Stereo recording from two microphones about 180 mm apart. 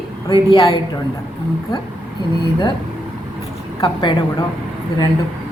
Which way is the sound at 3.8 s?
25° left (ahead or behind).